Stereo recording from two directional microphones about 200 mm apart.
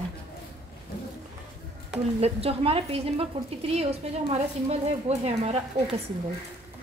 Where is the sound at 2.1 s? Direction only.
30° right (ahead or behind).